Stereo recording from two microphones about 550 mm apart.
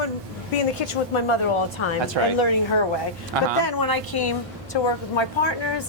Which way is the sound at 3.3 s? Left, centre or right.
Right.